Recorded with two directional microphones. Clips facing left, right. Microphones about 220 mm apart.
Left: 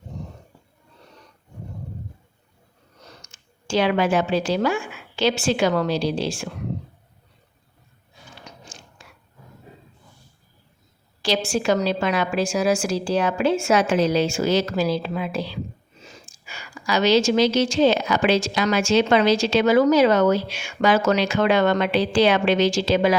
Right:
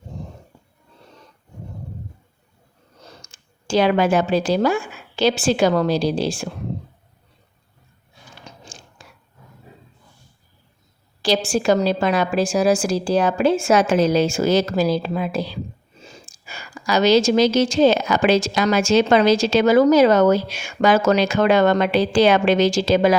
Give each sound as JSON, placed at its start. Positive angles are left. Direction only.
{"t": 3.2, "sound": "a woman's voice", "side_deg": -35}
{"t": 8.4, "sound": "biting", "side_deg": -30}
{"t": 11.2, "sound": "a woman's voice", "side_deg": -35}